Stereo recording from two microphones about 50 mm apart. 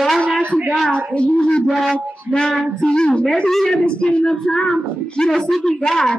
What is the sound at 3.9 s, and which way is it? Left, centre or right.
A woman's voice, left.